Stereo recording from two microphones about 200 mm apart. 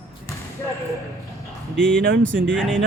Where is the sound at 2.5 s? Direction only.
Centre (ahead or behind).